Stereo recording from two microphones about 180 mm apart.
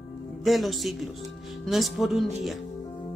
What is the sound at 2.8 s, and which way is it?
Music, 25° left (ahead or behind).